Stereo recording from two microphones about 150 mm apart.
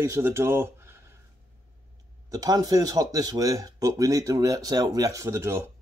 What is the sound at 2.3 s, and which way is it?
Speech, 25° right (ahead or behind).